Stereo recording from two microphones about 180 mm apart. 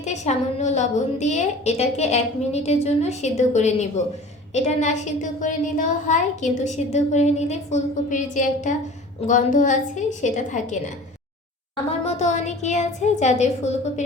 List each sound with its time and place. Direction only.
0.0 s a woman's voice: 40° left (ahead or behind)
11.9 s a woman's voice: 35° left (ahead or behind)